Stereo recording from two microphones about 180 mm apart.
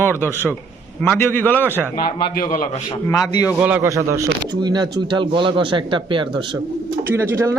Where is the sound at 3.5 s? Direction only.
10° right (ahead or behind); by 6.3 s 30° right (ahead or behind).